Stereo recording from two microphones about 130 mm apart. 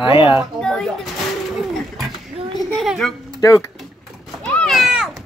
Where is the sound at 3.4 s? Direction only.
25° left (ahead or behind).